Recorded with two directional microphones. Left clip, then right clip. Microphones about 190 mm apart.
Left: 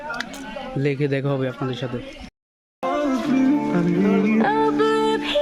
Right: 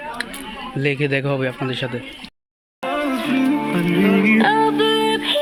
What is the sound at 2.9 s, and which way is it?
Music, 25° left (ahead or behind).